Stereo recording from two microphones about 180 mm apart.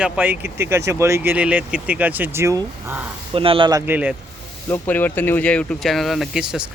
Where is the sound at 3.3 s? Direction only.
30° right (ahead or behind); by 4.2 s 10° right (ahead or behind).